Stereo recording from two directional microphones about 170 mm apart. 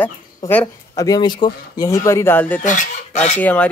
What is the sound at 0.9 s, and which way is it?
Speech, 20° left (ahead or behind).